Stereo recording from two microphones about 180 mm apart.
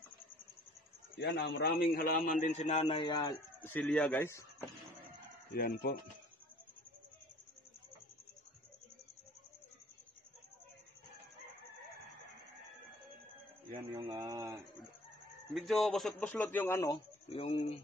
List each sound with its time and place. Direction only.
1.1 s a man's voice: 70° left (ahead or behind); by 2.3 s 50° left (ahead or behind)
2.4 s speech: 40° left (ahead or behind); by 3.3 s 25° left (ahead or behind)
3.6 s a man's voice: 10° left (ahead or behind)
5.5 s a man's voice: 60° left (ahead or behind)
13.9 s speech: 20° right (ahead or behind)
15.5 s a man's voice: centre (ahead or behind); by 17.0 s 15° left (ahead or behind)
17.3 s speech: 35° left (ahead or behind)